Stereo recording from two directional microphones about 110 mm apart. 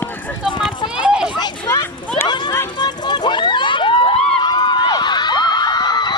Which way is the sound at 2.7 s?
40° left (ahead or behind).